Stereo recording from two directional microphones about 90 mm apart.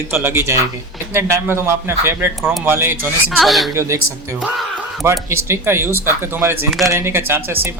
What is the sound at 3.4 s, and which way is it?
Speech, centre (ahead or behind).